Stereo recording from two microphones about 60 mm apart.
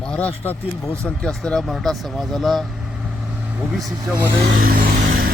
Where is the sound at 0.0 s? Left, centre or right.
Left.